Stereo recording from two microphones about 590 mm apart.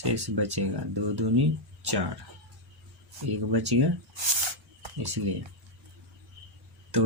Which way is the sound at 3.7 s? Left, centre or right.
Right.